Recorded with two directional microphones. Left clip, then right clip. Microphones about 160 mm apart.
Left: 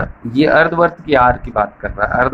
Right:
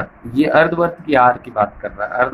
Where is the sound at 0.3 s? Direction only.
20° left (ahead or behind).